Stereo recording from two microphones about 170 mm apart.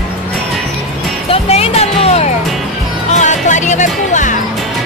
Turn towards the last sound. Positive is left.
turn(degrees=45)  # may be behind; listen again after turning